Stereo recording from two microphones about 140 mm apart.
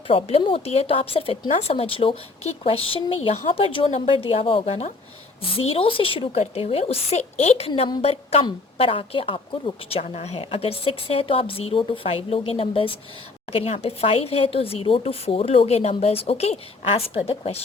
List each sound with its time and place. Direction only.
0.1 s a woman's voice: 45° left (ahead or behind)